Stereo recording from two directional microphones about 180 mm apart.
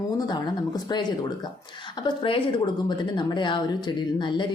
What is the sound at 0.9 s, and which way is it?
Speech, 20° left (ahead or behind).